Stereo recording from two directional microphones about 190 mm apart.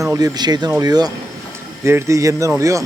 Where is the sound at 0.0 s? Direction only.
20° right (ahead or behind).